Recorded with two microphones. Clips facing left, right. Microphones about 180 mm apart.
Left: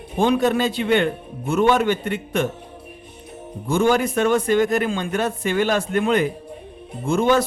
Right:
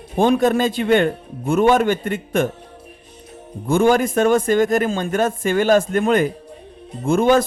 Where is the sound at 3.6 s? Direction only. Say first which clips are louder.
Right 3 dB; 55° right (ahead or behind).